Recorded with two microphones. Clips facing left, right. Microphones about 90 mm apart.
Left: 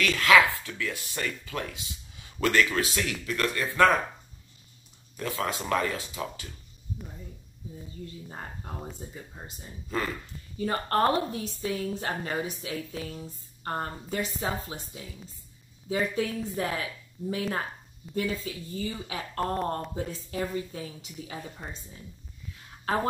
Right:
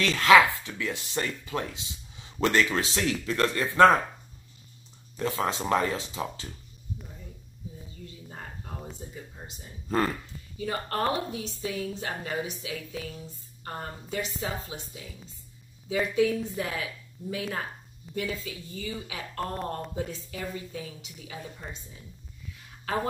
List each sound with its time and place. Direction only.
0.0 s speech: 25° right (ahead or behind)
5.2 s speech: 25° right (ahead or behind)
8.3 s a sound: 35° left (ahead or behind)
9.8 s speech: 45° right (ahead or behind)
10.6 s a woman's voice: 40° left (ahead or behind)